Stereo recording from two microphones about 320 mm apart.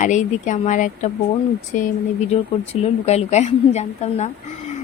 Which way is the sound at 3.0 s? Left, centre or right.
Left.